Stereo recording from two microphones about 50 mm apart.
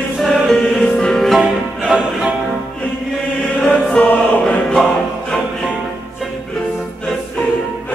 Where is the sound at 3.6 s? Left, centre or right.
Centre.